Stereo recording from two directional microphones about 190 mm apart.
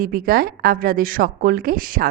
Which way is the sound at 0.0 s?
50° right (ahead or behind).